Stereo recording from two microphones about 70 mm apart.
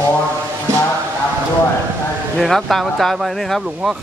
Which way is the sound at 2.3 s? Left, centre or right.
Centre.